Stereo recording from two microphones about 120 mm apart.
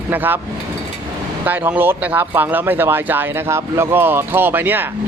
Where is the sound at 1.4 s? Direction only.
15° right (ahead or behind).